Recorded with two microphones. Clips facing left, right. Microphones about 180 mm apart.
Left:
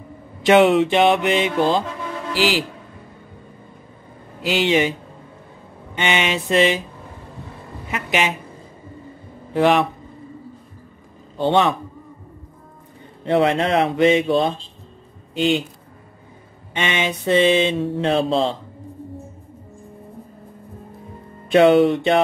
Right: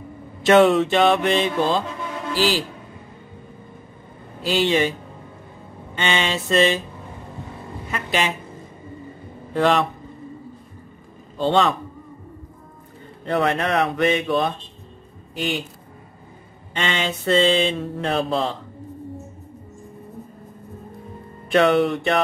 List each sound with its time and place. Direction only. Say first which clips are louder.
0.5 s mantra: left 1 dB; 15° left (ahead or behind)
4.5 s mantra: left 1 dB; 15° left (ahead or behind)
5.9 s mantra: left 2 dB; 15° left (ahead or behind)
7.9 s mantra: left 2 dB; 15° left (ahead or behind)
9.5 s mantra: left 2 dB; 15° left (ahead or behind)
11.3 s mantra: left 1 dB; 20° left (ahead or behind)
13.2 s speech: left 4 dB; 20° left (ahead or behind)
16.7 s mantra: left 2 dB; 15° left (ahead or behind)
17.9 s speech: left 5 dB; 25° left (ahead or behind)
21.5 s speech: left 4 dB; 25° left (ahead or behind)